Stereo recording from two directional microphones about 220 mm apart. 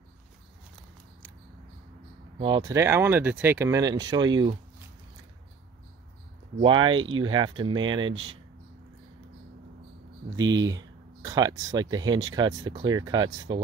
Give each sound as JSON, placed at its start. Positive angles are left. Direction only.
{"t": 2.3, "sound": "speech", "side_deg": -20}
{"t": 6.6, "sound": "speech", "side_deg": -20}
{"t": 10.3, "sound": "speech", "side_deg": -15}